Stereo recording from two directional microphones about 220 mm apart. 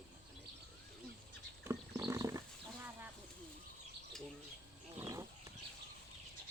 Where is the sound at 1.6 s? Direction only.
15° right (ahead or behind).